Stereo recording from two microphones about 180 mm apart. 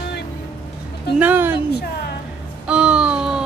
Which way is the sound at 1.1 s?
10° right (ahead or behind).